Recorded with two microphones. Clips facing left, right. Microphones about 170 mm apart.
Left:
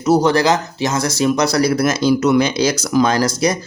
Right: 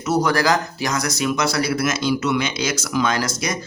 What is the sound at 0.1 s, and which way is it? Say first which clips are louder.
Speech: left 5 dB; 25° left (ahead or behind).